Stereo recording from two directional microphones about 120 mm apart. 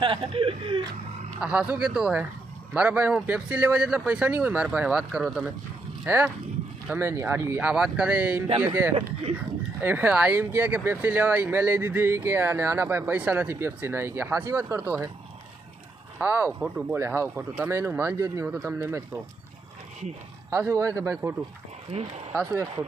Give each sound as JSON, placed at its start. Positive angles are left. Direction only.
{"t": 0.0, "sound": "speech", "side_deg": -45}
{"t": 1.4, "sound": "speech", "side_deg": -10}
{"t": 7.6, "sound": "speech", "side_deg": -5}
{"t": 16.1, "sound": "speech", "side_deg": -15}
{"t": 16.9, "sound": "speech", "side_deg": -20}
{"t": 20.5, "sound": "speech", "side_deg": -25}
{"t": 21.9, "sound": "speech", "side_deg": -65}